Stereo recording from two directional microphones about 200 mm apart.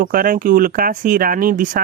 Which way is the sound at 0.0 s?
45° right (ahead or behind).